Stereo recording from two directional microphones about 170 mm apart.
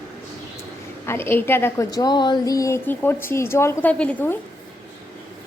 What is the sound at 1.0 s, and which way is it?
A woman's voice, 15° left (ahead or behind).